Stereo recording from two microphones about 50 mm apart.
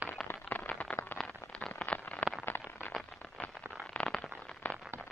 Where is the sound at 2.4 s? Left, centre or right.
Left.